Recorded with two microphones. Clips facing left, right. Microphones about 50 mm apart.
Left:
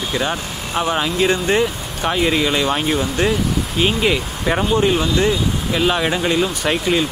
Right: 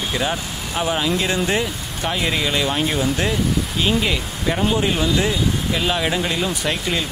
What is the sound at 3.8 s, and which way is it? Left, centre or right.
Speech, centre.